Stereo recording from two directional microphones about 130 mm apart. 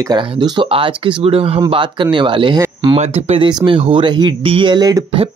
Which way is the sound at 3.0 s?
50° right (ahead or behind).